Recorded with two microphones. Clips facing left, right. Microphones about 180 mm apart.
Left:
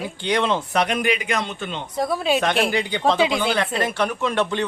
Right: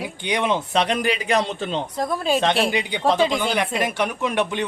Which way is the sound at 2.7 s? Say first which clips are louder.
Left 1 dB; 15° right (ahead or behind).